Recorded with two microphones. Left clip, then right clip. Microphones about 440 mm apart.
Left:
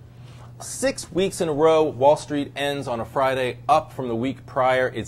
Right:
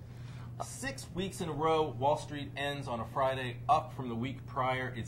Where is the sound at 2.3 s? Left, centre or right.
Left.